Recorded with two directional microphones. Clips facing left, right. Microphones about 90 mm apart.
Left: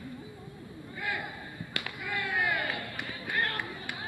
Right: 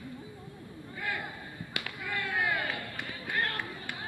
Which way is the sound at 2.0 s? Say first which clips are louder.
Left 1 dB; 10° left (ahead or behind).